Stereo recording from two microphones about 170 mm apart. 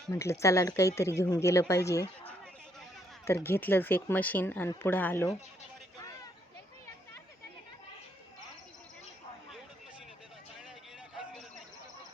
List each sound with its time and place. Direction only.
0.1 s speech: 15° left (ahead or behind)
3.2 s speech: 15° left (ahead or behind)